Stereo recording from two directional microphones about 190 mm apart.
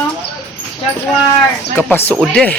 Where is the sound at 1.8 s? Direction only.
10° left (ahead or behind).